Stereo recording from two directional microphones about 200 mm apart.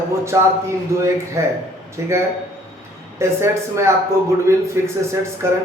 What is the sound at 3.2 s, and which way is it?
Speech, 15° right (ahead or behind).